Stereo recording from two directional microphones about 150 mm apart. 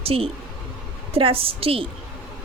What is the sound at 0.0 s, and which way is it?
A woman's voice, 40° right (ahead or behind).